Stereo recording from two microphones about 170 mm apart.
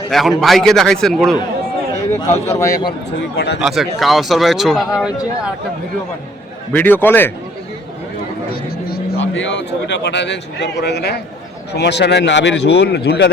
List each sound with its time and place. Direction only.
0.1 s speech: centre (ahead or behind)
2.6 s a man's voice: 20° left (ahead or behind)
3.3 s speech: 75° left (ahead or behind)
3.6 s speech: centre (ahead or behind)
6.7 s a man's voice: 10° left (ahead or behind)
8.9 s speech: 90° left